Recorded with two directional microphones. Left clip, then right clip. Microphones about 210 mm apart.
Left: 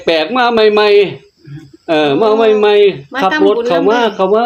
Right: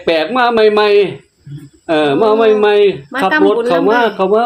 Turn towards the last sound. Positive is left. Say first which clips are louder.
# even
turn(degrees=0)  # may be behind; listen again after turning